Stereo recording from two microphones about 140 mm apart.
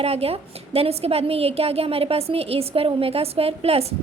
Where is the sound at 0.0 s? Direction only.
45° right (ahead or behind).